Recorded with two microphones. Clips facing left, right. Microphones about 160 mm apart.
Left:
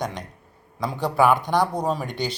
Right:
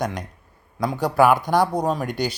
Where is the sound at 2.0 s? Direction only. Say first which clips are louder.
Right 3 dB; 45° right (ahead or behind).